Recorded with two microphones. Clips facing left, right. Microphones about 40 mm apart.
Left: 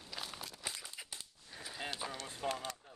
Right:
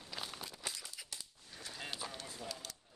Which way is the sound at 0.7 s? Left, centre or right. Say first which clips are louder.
Left 1 dB; centre.